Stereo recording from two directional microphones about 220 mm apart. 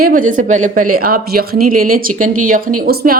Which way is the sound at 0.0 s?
35° right (ahead or behind).